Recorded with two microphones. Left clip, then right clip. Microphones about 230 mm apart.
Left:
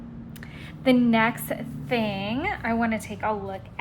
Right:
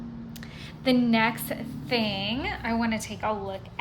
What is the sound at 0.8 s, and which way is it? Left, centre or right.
A woman's voice, centre.